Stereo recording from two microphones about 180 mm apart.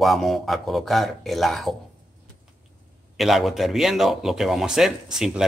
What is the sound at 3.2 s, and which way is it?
Speech, centre (ahead or behind).